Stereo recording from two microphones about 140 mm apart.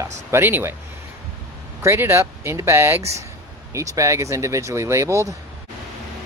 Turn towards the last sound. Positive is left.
turn(degrees=-20)  # may be behind; listen again after turning